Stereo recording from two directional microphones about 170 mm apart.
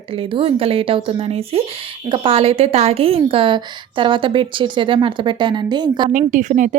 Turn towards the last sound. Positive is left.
turn(degrees=-45)  # may be behind; listen again after turning